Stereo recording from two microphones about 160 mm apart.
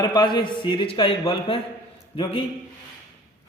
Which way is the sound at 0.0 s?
25° left (ahead or behind).